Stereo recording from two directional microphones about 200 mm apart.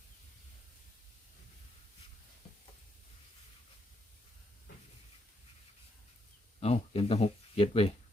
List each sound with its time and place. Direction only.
6.6 s speech: 30° left (ahead or behind)